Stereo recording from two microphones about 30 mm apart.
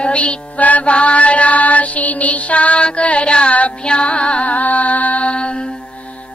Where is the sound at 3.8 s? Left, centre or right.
Left.